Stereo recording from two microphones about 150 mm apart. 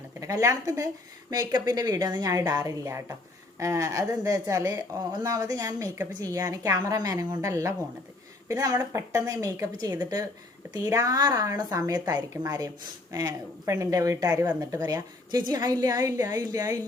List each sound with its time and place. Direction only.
0.2 s a woman's voice: 20° right (ahead or behind)